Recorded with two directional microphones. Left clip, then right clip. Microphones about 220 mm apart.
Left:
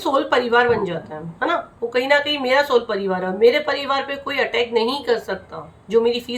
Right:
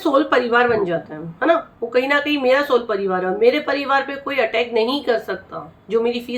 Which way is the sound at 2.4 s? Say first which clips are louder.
Right 2 dB; centre (ahead or behind).